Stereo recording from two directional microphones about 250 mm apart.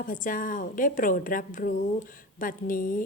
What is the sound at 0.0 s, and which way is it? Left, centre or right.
Speech, left.